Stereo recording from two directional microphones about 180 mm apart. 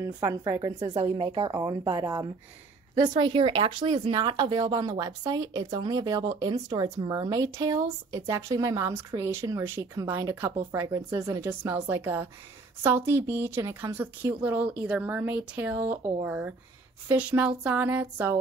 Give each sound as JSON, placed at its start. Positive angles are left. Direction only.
{"t": 0.0, "sound": "a woman's voice", "side_deg": -15}